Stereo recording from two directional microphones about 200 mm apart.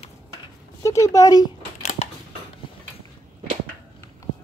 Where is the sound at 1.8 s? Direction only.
40° left (ahead or behind).